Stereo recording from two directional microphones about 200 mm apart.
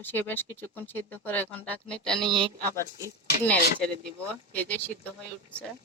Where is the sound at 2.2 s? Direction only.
25° right (ahead or behind).